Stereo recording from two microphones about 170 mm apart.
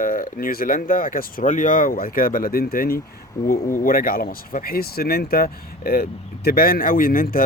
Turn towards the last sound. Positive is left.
turn(degrees=55)  # may be behind; listen again after turning